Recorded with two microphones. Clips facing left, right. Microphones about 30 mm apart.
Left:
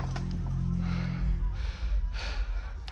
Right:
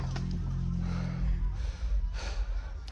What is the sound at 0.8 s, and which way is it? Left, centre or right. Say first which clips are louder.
Music: left 2 dB; left.